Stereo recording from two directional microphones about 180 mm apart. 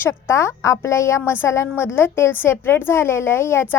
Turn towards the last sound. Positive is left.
turn(degrees=15)  # may be behind; listen again after turning